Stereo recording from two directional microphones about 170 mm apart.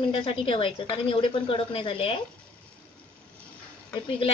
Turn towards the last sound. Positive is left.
turn(degrees=35)  # may be behind; listen again after turning